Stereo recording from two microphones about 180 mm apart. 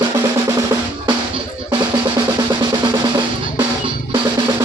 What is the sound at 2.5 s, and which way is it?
Drum, 25° right (ahead or behind).